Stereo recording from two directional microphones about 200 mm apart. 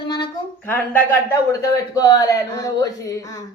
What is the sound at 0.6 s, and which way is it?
Speech, 10° left (ahead or behind).